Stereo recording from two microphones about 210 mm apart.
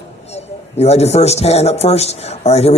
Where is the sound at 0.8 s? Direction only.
30° left (ahead or behind).